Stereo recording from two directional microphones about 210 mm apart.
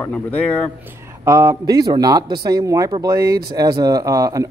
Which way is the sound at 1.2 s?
15° right (ahead or behind).